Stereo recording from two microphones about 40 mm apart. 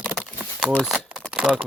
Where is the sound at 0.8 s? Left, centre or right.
Centre.